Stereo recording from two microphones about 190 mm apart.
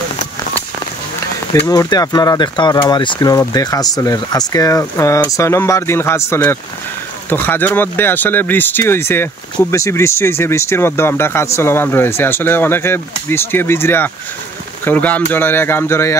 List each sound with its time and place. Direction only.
1.7 s speech: 20° left (ahead or behind)